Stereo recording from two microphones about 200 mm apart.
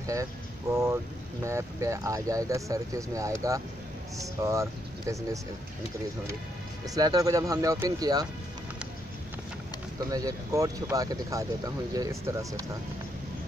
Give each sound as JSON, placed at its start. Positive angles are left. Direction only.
{"t": 0.0, "sound": "speech", "side_deg": -15}
{"t": 6.9, "sound": "speech", "side_deg": -20}
{"t": 9.9, "sound": "speech", "side_deg": -20}